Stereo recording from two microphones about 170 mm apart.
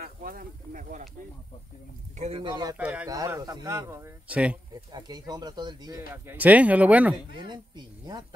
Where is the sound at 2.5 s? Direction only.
25° right (ahead or behind).